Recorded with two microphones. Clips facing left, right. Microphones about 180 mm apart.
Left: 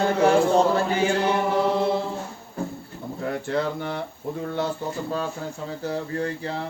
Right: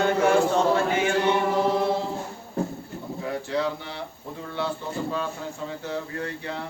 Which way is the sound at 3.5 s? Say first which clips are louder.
Left 2 dB; 55° left (ahead or behind).